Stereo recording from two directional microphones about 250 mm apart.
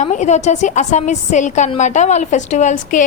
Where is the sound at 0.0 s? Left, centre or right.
Left.